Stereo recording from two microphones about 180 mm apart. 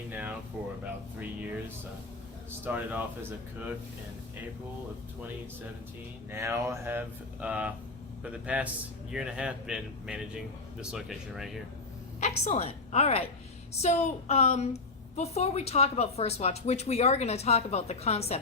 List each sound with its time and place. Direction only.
0.1 s a sound: 10° right (ahead or behind)
2.6 s speech: 10° right (ahead or behind)
6.3 s speech: 15° right (ahead or behind)
12.2 s a woman's voice: 40° left (ahead or behind)